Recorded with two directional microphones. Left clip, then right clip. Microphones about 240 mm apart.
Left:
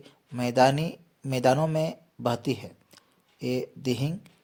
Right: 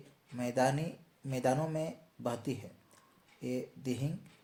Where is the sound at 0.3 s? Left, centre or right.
Left.